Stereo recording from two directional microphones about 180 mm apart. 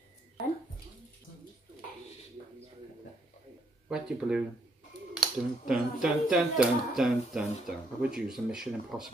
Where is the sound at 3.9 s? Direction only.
5° right (ahead or behind).